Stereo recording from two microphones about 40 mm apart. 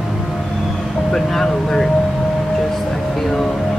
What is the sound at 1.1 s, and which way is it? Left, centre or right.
Vehicle, centre.